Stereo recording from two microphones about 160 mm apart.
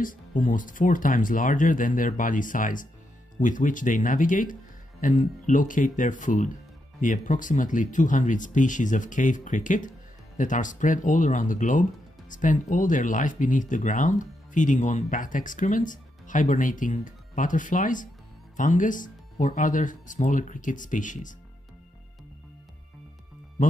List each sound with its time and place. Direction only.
0.0 s speech: 55° left (ahead or behind)